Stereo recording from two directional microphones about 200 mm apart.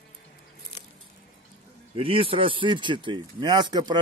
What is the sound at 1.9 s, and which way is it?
Speech, 25° right (ahead or behind).